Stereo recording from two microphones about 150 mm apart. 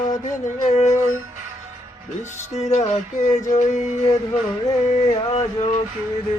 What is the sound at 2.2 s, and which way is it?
Music, 50° left (ahead or behind).